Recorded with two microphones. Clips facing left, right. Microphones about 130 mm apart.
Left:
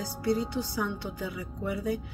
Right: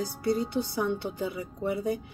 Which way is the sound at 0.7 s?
25° right (ahead or behind).